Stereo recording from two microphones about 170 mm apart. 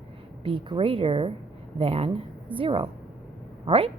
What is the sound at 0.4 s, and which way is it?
A woman's voice, 30° right (ahead or behind).